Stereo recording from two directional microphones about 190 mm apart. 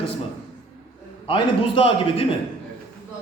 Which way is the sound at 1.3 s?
30° left (ahead or behind).